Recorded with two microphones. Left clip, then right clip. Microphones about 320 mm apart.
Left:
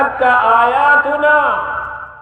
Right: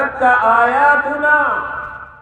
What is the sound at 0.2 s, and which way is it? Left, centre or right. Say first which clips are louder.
A man's voice: even; left.